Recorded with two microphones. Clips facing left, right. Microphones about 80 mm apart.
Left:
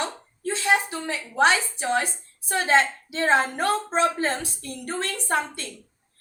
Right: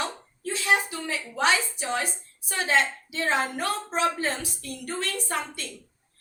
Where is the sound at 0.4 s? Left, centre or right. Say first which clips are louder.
Left 2 dB; left.